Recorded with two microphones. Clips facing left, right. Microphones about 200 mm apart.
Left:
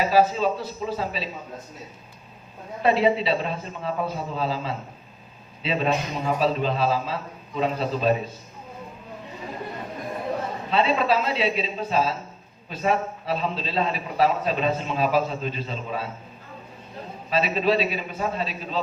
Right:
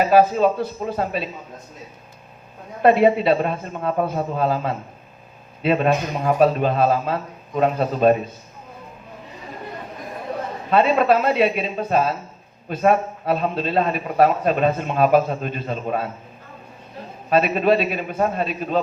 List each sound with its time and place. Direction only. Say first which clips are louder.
0.0 s a man's voice: right 5 dB; 55° right (ahead or behind)
2.8 s a man's voice: right 6 dB; 55° right (ahead or behind)
10.7 s a man's voice: right 6 dB; 50° right (ahead or behind)
17.2 s a man's voice: right 5 dB; 55° right (ahead or behind)